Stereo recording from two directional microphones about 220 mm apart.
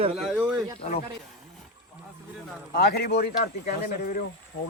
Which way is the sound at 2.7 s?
45° left (ahead or behind).